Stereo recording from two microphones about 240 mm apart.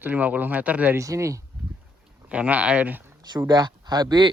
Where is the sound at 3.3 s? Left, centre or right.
Centre.